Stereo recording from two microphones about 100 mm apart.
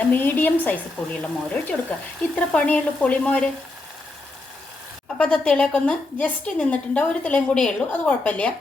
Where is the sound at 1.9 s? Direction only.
10° left (ahead or behind).